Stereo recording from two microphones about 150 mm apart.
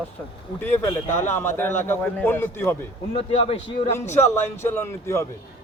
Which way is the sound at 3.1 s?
40° left (ahead or behind).